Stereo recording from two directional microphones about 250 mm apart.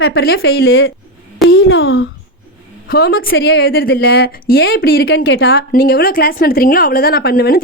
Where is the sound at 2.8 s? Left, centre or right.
Left.